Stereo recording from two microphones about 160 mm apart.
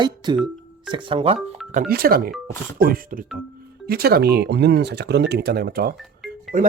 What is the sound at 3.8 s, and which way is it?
Speech, 75° right (ahead or behind).